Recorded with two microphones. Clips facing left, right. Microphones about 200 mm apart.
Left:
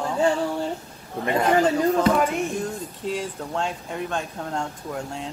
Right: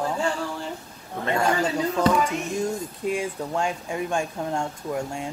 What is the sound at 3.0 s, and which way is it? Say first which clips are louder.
Speech: right 2 dB; 10° right (ahead or behind).